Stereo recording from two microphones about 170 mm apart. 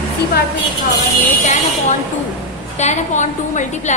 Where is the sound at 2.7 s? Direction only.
45° left (ahead or behind).